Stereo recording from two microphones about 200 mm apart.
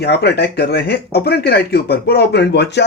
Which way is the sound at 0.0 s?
55° left (ahead or behind).